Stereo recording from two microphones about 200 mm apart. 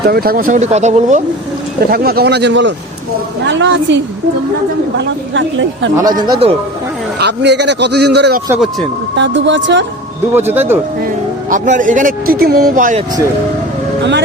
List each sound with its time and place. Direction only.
0.0 s speech: 50° right (ahead or behind)
1.8 s a man's voice: 50° right (ahead or behind); by 5.9 s 70° right (ahead or behind)
6.0 s speech: 20° right (ahead or behind)
7.2 s a man's voice: 60° right (ahead or behind)
10.3 s speech: 10° right (ahead or behind)
11.5 s speech: 40° right (ahead or behind)